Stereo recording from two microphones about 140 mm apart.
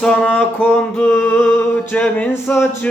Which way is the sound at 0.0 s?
5° left (ahead or behind).